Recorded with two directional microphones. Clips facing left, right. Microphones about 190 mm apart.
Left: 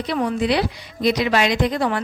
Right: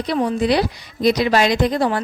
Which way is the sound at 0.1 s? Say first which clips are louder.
Right 2 dB; 30° right (ahead or behind).